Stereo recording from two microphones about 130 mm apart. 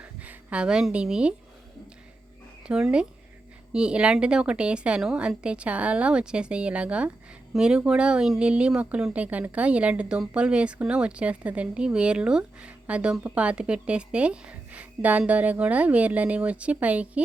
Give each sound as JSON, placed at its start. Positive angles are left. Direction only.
{"t": 0.0, "sound": "speech", "side_deg": -10}
{"t": 2.6, "sound": "speech", "side_deg": -5}